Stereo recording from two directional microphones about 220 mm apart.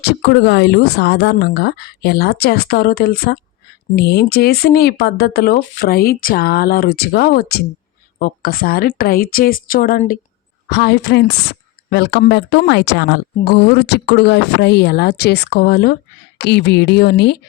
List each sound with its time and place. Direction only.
0.0 s a woman's voice: 50° left (ahead or behind)
10.7 s a woman's voice: 50° left (ahead or behind)